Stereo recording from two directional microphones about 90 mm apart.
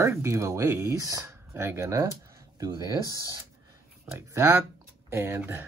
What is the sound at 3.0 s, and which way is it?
Speech, 40° left (ahead or behind).